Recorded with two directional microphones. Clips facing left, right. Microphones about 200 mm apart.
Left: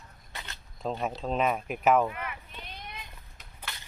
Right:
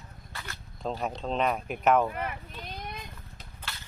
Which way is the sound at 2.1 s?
40° right (ahead or behind).